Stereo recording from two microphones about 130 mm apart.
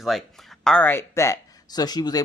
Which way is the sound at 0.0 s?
Centre (ahead or behind).